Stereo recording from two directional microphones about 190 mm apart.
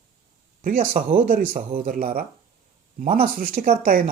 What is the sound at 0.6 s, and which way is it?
Speech, 45° right (ahead or behind).